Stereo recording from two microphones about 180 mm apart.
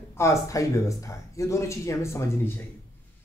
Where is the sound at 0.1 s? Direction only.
15° left (ahead or behind).